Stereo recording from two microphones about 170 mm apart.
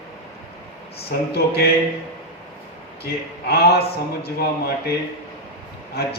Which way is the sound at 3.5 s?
70° left (ahead or behind).